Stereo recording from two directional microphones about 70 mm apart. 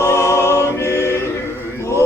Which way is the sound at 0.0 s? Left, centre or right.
Left.